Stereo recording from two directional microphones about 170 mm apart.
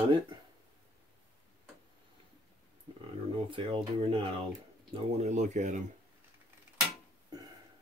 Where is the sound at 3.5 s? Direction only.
30° right (ahead or behind).